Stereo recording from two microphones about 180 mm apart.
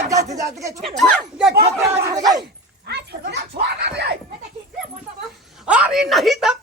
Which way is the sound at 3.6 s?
70° right (ahead or behind).